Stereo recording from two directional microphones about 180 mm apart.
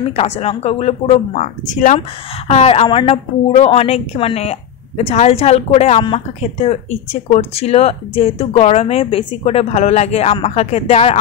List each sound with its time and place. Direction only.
0.1 s a woman's voice: 35° left (ahead or behind)